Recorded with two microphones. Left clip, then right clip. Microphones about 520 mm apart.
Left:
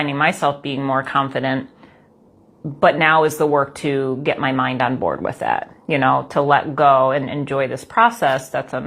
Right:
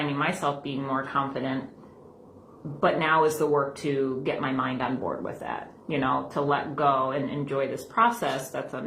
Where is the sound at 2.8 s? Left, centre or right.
Left.